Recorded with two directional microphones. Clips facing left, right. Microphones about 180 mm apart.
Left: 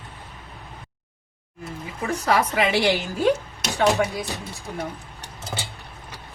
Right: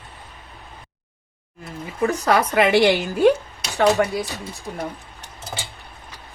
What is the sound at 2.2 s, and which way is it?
A woman's voice, 60° right (ahead or behind).